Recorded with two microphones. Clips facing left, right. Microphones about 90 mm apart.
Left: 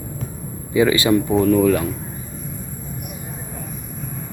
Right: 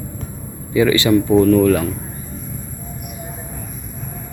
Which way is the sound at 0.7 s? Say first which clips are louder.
Right 2 dB; 20° left (ahead or behind).